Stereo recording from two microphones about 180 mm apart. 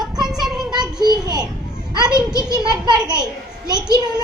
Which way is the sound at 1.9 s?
25° right (ahead or behind).